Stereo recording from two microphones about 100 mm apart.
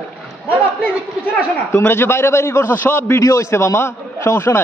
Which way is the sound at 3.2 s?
30° left (ahead or behind).